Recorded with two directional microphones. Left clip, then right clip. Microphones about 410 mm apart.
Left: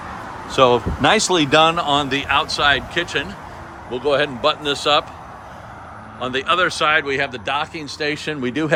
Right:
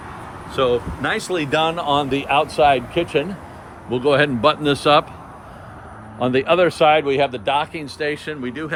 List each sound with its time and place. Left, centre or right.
0.5 s speech: centre
3.9 s speech: centre
6.1 s speech: centre